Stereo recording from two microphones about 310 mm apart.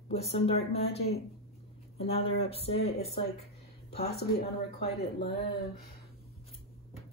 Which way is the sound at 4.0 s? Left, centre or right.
Left.